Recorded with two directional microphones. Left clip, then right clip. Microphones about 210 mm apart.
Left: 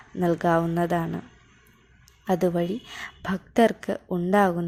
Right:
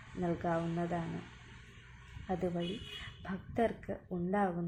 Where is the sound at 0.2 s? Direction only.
40° left (ahead or behind).